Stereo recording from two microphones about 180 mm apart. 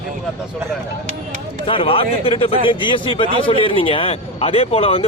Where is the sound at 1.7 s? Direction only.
30° left (ahead or behind).